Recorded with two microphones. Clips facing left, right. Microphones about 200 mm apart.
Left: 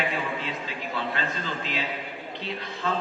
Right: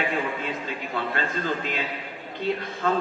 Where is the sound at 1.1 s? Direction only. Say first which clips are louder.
Right 4 dB; 50° right (ahead or behind).